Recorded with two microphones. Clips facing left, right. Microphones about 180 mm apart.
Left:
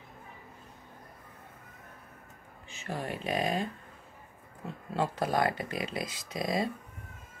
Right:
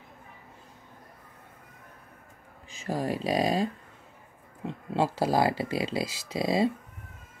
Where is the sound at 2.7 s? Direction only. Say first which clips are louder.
Right 6 dB; 35° right (ahead or behind).